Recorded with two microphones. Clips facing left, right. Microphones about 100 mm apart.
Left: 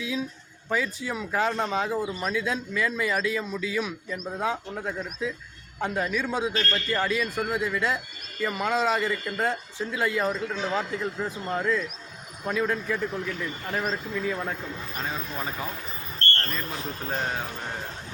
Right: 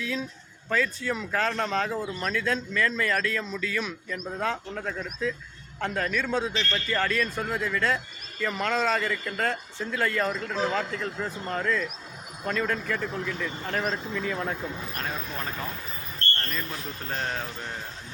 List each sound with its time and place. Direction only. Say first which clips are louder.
0.0 s speech: left 1 dB; 10° left (ahead or behind)
6.5 s a man's voice: left 2 dB; 45° left (ahead or behind)
6.7 s speech: right 3 dB; 10° left (ahead or behind)
17.1 s speech: left 1 dB; 10° left (ahead or behind)